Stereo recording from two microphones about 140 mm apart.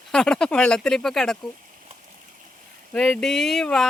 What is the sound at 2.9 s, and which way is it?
Speech, 5° left (ahead or behind).